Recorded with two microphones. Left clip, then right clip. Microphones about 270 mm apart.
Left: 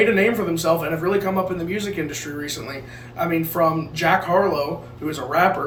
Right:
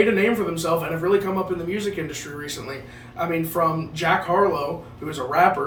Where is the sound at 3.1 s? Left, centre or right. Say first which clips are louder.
Left 2 dB; centre.